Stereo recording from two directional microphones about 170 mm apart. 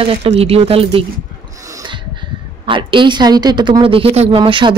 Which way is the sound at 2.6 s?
30° right (ahead or behind).